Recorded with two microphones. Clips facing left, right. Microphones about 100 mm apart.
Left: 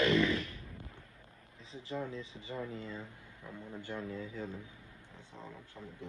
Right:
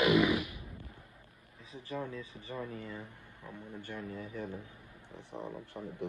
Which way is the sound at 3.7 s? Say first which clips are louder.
Left 2 dB; 20° left (ahead or behind).